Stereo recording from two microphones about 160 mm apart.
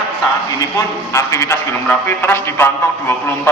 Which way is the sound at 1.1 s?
20° left (ahead or behind).